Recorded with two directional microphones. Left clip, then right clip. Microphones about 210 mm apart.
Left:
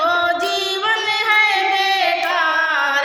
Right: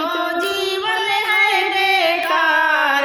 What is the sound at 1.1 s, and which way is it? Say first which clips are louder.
Carnatic music: even; 10° left (ahead or behind).